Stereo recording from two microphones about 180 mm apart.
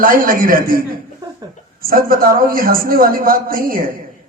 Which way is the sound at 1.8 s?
55° right (ahead or behind).